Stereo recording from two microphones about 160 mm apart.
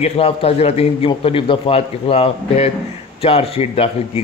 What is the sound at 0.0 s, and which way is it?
A man's voice, 35° left (ahead or behind).